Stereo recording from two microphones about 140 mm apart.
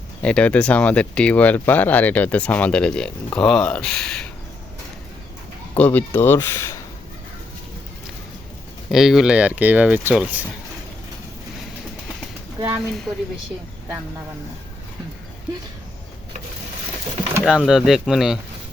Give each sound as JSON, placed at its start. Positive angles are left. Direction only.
{"t": 0.2, "sound": "speech", "side_deg": 10}
{"t": 5.7, "sound": "speech", "side_deg": 10}
{"t": 8.9, "sound": "speech", "side_deg": 0}
{"t": 12.5, "sound": "speech", "side_deg": -20}
{"t": 17.4, "sound": "speech", "side_deg": 0}